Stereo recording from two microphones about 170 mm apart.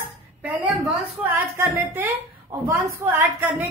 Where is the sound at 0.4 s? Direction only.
10° right (ahead or behind).